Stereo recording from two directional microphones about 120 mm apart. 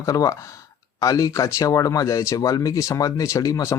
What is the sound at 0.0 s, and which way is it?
Speech, 30° left (ahead or behind).